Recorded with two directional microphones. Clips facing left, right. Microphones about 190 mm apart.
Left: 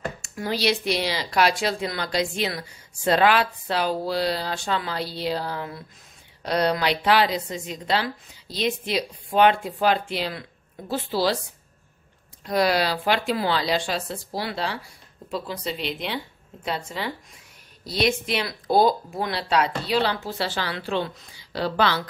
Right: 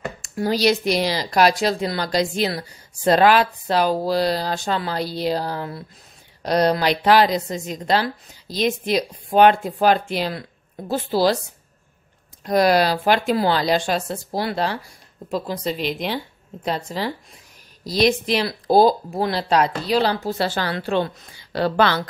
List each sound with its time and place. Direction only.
0.2 s a woman's voice: 40° right (ahead or behind)
12.4 s a woman's voice: 45° right (ahead or behind)